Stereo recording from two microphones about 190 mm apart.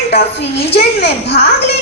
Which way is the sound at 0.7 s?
60° left (ahead or behind).